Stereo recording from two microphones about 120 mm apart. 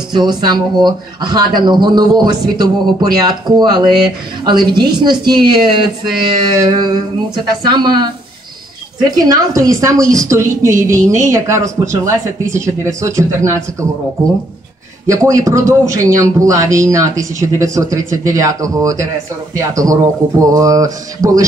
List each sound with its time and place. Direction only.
0.1 s a man's voice: 35° right (ahead or behind)
15.0 s a man's voice: 25° right (ahead or behind)